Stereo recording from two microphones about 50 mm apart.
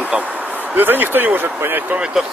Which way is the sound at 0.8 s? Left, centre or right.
Right.